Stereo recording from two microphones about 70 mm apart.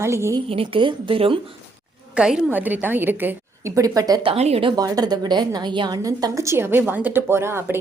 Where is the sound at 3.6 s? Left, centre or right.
Right.